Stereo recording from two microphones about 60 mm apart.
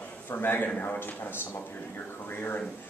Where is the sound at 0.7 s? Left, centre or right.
Left.